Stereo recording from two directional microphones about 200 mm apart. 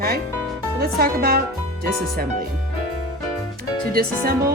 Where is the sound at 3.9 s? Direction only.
50° right (ahead or behind).